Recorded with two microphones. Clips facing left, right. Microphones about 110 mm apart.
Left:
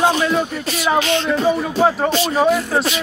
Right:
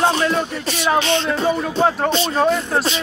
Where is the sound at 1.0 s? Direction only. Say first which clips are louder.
Left 1 dB; 30° right (ahead or behind).